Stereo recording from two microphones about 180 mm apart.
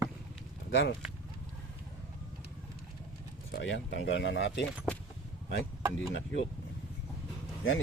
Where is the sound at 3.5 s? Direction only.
90° left.